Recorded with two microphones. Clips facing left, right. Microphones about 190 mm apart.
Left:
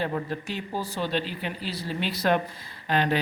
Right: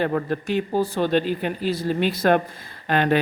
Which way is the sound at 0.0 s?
60° right (ahead or behind).